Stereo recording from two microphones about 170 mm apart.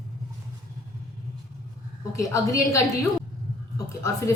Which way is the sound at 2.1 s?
20° left (ahead or behind).